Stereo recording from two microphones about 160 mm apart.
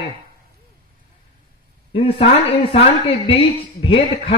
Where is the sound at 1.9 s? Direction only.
35° left (ahead or behind).